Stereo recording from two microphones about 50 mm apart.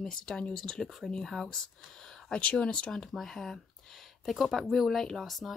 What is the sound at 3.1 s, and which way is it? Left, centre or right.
Speech, centre.